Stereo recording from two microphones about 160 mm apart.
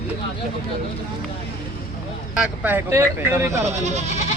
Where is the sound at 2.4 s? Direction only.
10° right (ahead or behind).